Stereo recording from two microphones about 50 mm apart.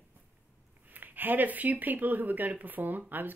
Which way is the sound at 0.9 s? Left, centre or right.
Right.